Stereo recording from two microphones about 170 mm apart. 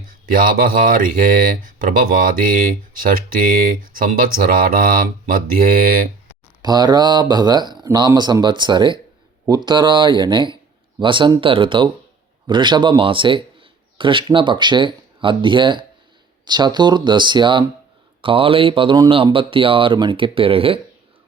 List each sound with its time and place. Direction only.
0.3 s speech: 55° right (ahead or behind)
6.6 s speech: 25° right (ahead or behind)